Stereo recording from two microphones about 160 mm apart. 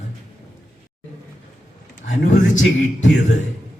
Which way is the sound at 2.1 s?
50° left (ahead or behind).